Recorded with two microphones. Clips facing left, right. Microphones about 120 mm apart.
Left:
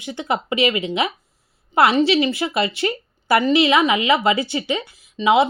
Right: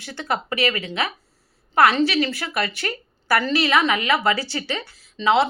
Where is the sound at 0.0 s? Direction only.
15° left (ahead or behind).